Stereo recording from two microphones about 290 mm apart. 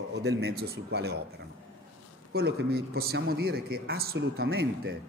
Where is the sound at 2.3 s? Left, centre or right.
Right.